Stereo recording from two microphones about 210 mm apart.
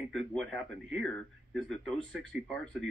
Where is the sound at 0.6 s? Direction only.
60° right (ahead or behind).